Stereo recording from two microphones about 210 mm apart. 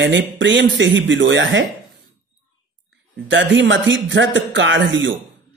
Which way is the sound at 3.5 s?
65° right (ahead or behind).